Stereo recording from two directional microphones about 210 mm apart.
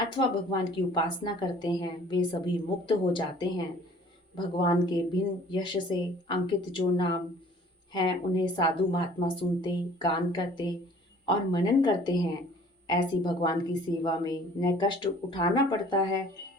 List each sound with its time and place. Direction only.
0.1 s a woman's voice: 20° left (ahead or behind)